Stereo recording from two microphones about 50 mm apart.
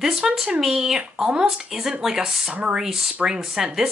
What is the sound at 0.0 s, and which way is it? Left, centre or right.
Speech, centre.